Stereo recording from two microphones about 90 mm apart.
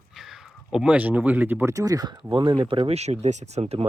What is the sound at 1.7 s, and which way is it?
Speech, 40° right (ahead or behind).